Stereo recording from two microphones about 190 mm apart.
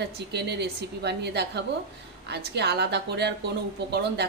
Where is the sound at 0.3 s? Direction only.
60° right (ahead or behind).